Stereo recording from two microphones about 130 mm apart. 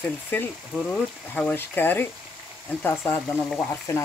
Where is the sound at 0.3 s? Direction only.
10° left (ahead or behind).